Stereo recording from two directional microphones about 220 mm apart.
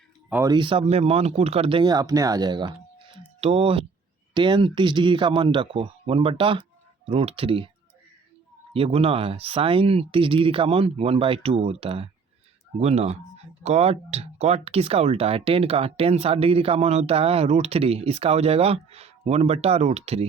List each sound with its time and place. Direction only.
0.3 s speech: 10° right (ahead or behind)
0.5 s speech: 25° right (ahead or behind)
8.7 s speech: 25° right (ahead or behind)